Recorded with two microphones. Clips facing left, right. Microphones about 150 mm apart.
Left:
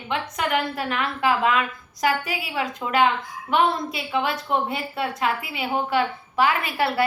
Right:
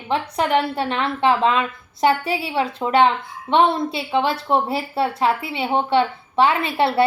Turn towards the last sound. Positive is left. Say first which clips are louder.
# right 4 dB
turn(degrees=-25)  # may be behind; listen again after turning